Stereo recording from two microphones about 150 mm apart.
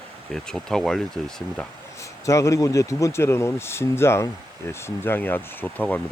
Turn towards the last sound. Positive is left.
turn(degrees=10)  # may be behind; listen again after turning